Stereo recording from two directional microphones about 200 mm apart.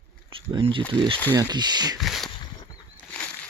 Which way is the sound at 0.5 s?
25° right (ahead or behind).